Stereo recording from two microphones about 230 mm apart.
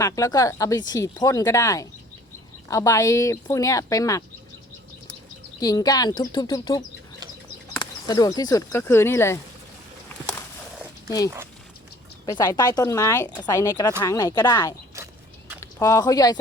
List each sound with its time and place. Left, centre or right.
0.0 s speech: centre
5.5 s speech: centre
8.0 s speech: centre
12.2 s speech: centre